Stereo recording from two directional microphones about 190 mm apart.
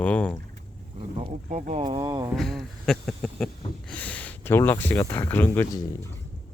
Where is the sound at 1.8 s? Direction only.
20° right (ahead or behind).